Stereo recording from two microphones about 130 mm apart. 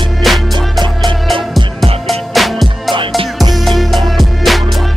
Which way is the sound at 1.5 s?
Centre (ahead or behind).